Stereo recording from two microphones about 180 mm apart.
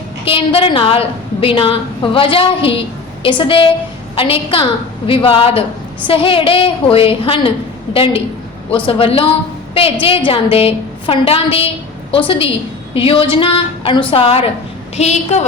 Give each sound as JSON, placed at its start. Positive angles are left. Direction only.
{"t": 0.3, "sound": "a woman's voice", "side_deg": 30}